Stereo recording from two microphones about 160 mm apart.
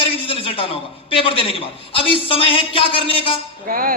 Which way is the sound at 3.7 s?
65° right (ahead or behind).